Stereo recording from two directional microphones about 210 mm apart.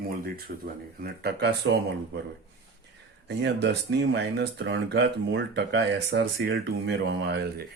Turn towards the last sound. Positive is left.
turn(degrees=-50)  # may be behind; listen again after turning